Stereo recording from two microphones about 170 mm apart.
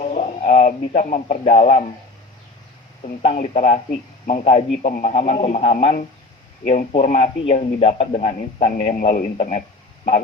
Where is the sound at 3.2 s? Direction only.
45° left (ahead or behind).